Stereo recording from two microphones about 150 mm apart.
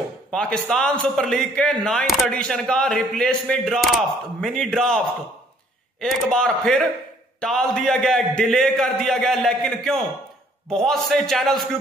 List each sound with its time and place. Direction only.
0.3 s a man's voice: 5° left (ahead or behind)